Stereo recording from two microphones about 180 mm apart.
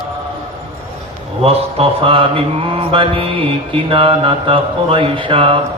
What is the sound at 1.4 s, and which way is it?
Mantra, 30° right (ahead or behind).